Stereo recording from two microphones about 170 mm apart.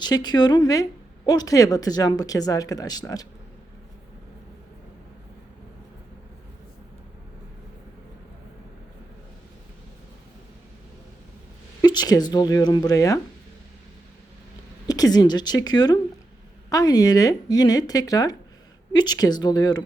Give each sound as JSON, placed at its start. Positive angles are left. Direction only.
{"t": 0.0, "sound": "a woman's voice", "side_deg": 25}
{"t": 11.8, "sound": "a woman's voice", "side_deg": 25}
{"t": 14.8, "sound": "a woman's voice", "side_deg": 20}